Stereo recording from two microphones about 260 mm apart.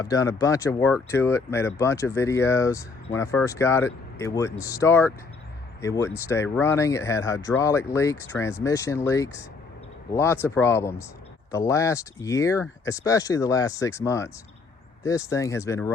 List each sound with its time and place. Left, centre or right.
0.0 s speech: centre